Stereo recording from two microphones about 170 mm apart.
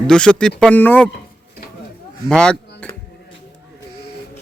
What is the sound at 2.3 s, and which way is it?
Speech, 5° left (ahead or behind).